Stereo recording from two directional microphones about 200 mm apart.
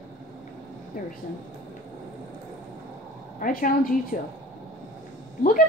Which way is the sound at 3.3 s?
45° left (ahead or behind).